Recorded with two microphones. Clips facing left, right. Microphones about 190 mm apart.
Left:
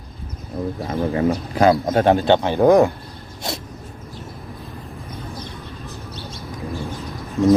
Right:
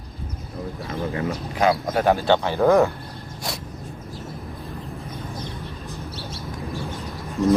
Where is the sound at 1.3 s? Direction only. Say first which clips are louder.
Left 4 dB; 45° left (ahead or behind).